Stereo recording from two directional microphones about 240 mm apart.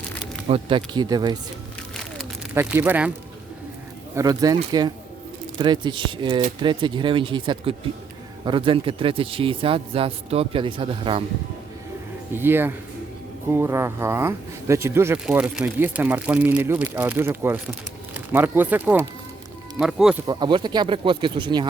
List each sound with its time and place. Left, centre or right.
0.4 s speech: right
2.1 s a sound: centre
4.1 s a man's voice: centre
12.4 s speech: centre
20.2 s a man's voice: centre